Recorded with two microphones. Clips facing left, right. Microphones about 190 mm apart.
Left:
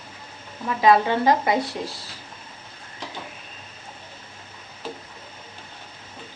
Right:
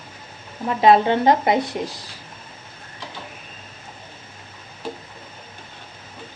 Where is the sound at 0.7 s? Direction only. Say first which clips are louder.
Right 3 dB; 25° right (ahead or behind).